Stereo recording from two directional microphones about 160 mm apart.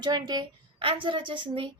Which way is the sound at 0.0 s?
25° right (ahead or behind).